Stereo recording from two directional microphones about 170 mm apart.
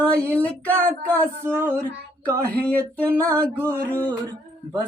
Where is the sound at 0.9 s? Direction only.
15° right (ahead or behind).